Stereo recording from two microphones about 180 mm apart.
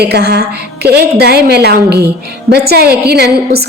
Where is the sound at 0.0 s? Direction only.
65° right (ahead or behind).